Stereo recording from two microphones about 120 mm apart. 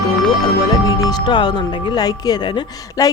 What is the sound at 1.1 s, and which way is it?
A woman's voice, 40° left (ahead or behind).